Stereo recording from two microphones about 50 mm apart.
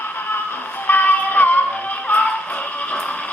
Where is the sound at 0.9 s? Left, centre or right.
Left.